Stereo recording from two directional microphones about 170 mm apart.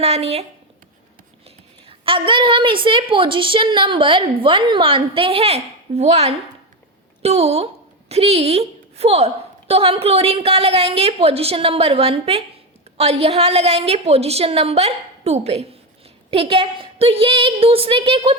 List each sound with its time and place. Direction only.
0.0 s a woman's voice: 35° right (ahead or behind)
1.9 s a woman's voice: 30° right (ahead or behind)